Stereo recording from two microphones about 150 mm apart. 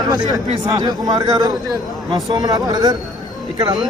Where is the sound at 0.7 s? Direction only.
25° right (ahead or behind).